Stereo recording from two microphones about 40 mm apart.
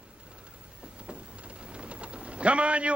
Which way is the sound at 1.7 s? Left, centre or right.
Right.